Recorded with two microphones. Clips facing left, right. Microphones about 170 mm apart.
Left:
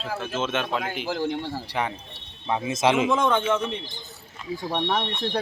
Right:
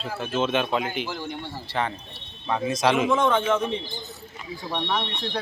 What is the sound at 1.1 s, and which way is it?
Speech, 90° left.